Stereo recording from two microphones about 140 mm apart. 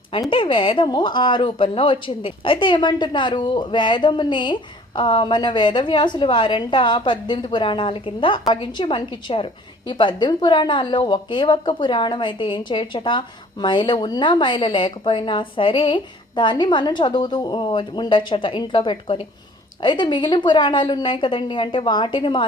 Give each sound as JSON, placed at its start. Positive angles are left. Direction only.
{"t": 0.2, "sound": "a woman's voice", "side_deg": 35}